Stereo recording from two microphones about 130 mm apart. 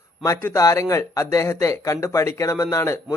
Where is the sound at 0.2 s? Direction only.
25° left (ahead or behind).